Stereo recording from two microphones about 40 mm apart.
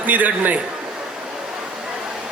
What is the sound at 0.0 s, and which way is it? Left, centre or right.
Speech, right.